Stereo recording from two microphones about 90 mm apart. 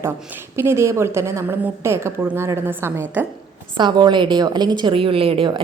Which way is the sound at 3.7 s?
55° right (ahead or behind).